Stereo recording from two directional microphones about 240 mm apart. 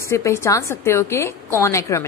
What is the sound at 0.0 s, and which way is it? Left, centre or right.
A woman's voice, centre.